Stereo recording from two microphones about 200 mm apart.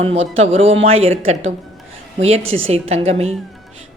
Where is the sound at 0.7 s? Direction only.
30° right (ahead or behind).